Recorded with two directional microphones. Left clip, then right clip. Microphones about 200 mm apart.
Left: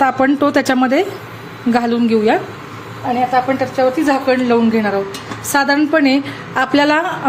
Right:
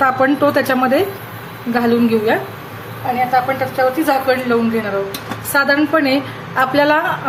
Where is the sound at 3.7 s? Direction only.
20° left (ahead or behind).